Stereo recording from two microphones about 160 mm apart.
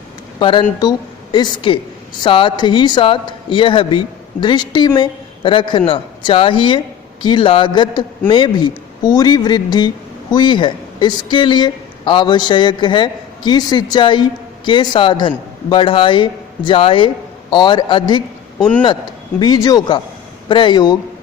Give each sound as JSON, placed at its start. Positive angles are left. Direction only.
{"t": 0.3, "sound": "a woman's voice", "side_deg": 30}
{"t": 19.4, "sound": "speech", "side_deg": 25}